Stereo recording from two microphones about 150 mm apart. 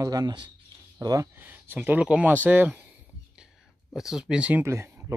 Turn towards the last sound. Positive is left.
turn(degrees=-15)  # may be behind; listen again after turning